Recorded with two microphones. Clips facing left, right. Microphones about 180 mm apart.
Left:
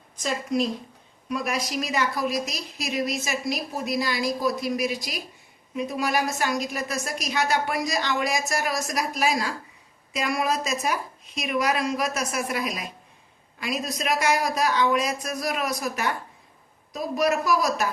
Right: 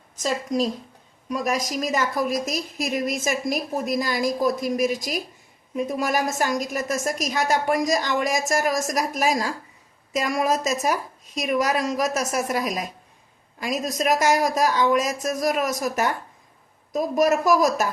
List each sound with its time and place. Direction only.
0.2 s a woman's voice: 40° right (ahead or behind)